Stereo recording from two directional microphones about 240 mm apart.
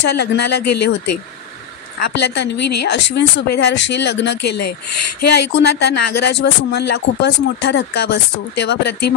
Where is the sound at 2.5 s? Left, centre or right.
Left.